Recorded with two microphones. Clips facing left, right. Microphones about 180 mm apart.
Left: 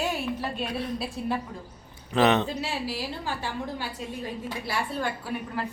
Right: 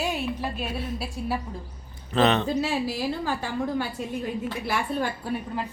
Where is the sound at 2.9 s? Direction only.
45° right (ahead or behind).